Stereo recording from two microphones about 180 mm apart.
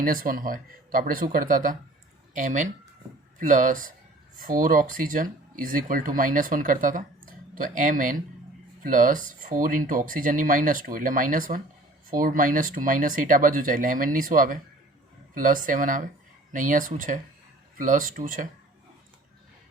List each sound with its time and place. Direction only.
0.0 s speech: 50° right (ahead or behind)